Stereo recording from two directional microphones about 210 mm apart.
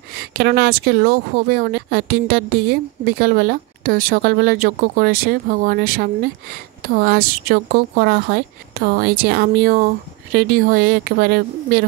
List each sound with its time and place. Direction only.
0.4 s speech: 50° right (ahead or behind)